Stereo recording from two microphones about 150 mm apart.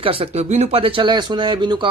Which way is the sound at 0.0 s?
35° right (ahead or behind).